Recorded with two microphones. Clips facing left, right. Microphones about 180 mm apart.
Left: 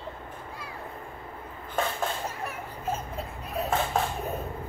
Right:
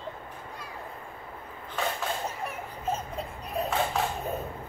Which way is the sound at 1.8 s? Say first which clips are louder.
Left 2 dB; 50° left (ahead or behind).